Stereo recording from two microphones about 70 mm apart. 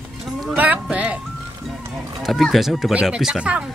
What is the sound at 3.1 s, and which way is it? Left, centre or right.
Speech, centre.